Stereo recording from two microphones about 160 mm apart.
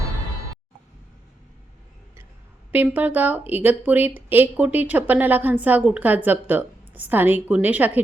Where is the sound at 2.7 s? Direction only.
10° right (ahead or behind).